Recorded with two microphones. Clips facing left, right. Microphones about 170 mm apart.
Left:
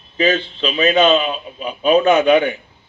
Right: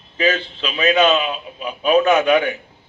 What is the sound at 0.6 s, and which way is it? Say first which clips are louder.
A man's voice: left 2 dB; 25° left (ahead or behind).